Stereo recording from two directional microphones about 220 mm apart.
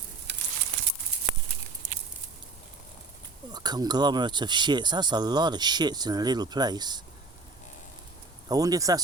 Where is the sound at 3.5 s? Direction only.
20° right (ahead or behind).